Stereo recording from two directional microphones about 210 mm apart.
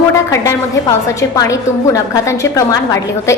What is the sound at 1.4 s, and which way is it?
A woman's voice, 15° left (ahead or behind).